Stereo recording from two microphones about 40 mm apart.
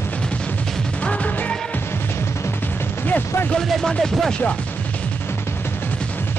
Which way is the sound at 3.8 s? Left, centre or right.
Centre.